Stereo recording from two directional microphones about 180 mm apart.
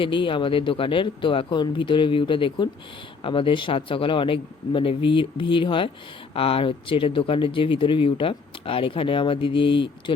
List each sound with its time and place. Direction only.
0.0 s speech: 25° left (ahead or behind)